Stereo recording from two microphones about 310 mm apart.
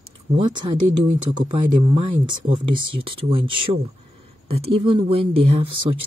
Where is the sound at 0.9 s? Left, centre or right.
Right.